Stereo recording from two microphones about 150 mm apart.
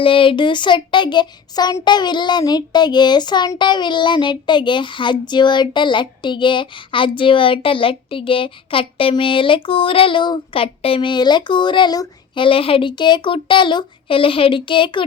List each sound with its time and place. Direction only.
0.0 s child singing: 35° left (ahead or behind)